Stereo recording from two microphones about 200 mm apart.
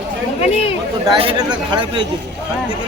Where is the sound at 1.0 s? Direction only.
25° right (ahead or behind).